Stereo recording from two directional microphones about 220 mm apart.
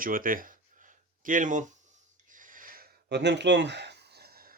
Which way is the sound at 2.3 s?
35° right (ahead or behind).